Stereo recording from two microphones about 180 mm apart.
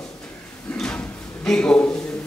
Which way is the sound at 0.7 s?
5° left (ahead or behind).